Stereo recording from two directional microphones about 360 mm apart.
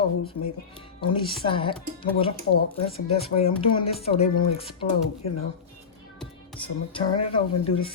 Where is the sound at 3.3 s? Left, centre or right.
Centre.